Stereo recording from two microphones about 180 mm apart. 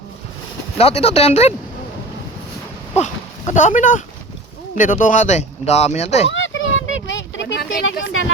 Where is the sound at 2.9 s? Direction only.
40° left (ahead or behind).